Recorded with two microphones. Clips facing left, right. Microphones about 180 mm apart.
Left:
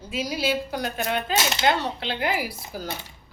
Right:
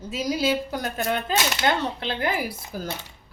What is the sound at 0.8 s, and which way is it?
Speech, 45° right (ahead or behind).